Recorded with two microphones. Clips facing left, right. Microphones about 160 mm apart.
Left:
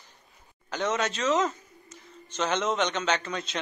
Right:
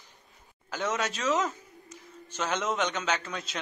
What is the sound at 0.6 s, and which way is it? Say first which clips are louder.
A man's voice: left 3 dB; 5° right (ahead or behind).